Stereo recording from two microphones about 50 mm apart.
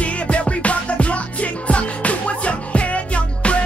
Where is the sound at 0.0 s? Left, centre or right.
Left.